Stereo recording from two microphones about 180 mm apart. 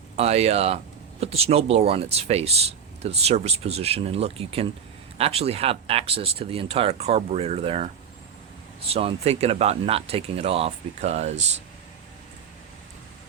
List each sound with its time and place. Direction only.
0.2 s speech: 35° right (ahead or behind)
8.9 s speech: 35° right (ahead or behind)